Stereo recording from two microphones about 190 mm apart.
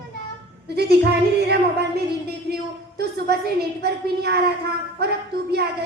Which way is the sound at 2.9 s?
60° right (ahead or behind).